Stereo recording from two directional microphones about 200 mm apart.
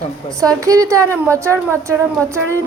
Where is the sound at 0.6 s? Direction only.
15° right (ahead or behind).